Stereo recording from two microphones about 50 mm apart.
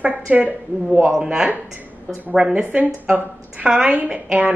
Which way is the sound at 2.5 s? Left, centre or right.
Right.